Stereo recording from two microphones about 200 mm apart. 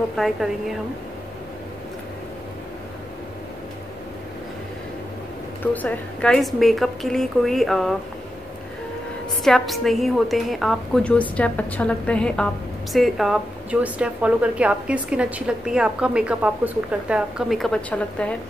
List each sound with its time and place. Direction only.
0.1 s a woman's voice: centre (ahead or behind)
5.6 s a woman's voice: 10° left (ahead or behind)
9.4 s a woman's voice: centre (ahead or behind)